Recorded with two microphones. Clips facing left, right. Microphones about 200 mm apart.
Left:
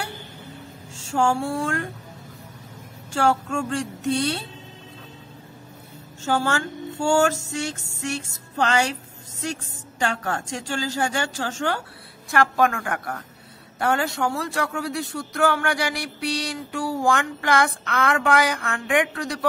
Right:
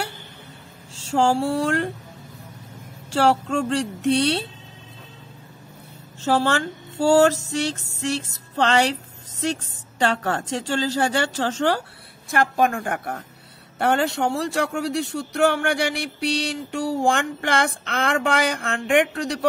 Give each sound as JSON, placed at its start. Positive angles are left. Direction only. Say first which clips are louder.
{"t": 1.0, "sound": "speech", "louder": "right 3 dB", "side_deg": -35}
{"t": 3.1, "sound": "speech", "louder": "right 2 dB", "side_deg": -35}
{"t": 6.2, "sound": "speech", "louder": "right 3 dB", "side_deg": -35}
{"t": 12.3, "sound": "a sound", "louder": "even", "side_deg": -20}